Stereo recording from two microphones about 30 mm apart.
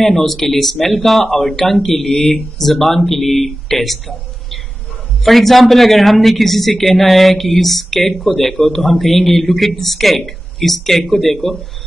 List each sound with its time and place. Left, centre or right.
0.0 s speech: centre